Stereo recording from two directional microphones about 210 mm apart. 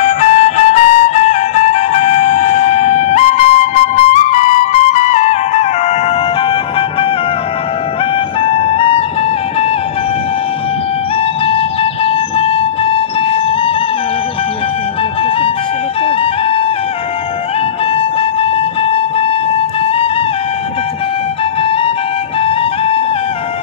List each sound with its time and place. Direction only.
0.0 s music: 35° left (ahead or behind)
8.4 s music: 25° left (ahead or behind)
11.4 s music: 25° left (ahead or behind)
16.1 s music: 25° left (ahead or behind)
17.9 s music: 25° left (ahead or behind)
22.4 s music: 25° left (ahead or behind)